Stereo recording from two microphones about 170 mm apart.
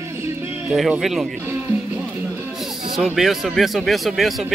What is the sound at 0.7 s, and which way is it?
Speech, centre (ahead or behind).